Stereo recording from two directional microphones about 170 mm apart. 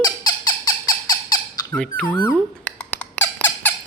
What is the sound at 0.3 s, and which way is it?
Squeak, 20° left (ahead or behind).